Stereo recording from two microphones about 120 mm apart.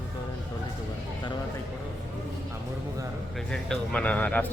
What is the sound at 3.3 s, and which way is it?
Speech, 5° left (ahead or behind).